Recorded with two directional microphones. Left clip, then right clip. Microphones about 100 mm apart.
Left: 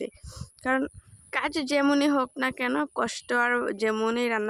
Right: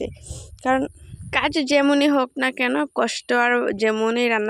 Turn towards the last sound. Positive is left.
turn(degrees=-40)  # may be behind; listen again after turning